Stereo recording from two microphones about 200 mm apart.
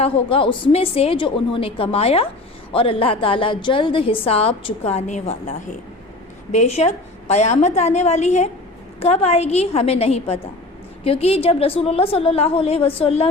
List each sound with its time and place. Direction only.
0.0 s a woman's voice: 30° left (ahead or behind)